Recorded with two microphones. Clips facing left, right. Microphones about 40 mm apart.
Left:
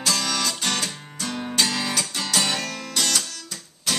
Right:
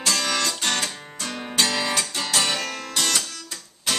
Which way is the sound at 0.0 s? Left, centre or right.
Centre.